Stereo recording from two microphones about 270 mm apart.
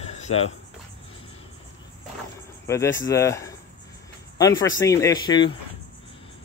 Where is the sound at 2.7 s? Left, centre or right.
Centre.